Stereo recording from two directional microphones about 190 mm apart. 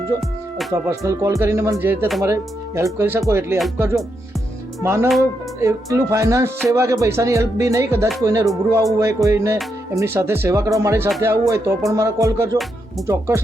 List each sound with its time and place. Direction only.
0.7 s speech: 15° right (ahead or behind)